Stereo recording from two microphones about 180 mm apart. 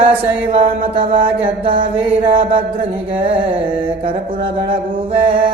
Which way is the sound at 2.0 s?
30° right (ahead or behind).